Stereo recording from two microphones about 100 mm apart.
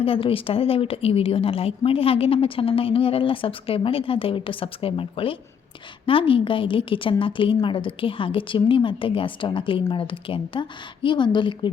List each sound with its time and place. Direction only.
0.0 s a woman's voice: 65° left (ahead or behind); by 11.7 s 50° left (ahead or behind)